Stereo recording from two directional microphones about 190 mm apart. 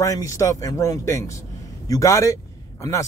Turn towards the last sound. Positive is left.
turn(degrees=15)  # may be behind; listen again after turning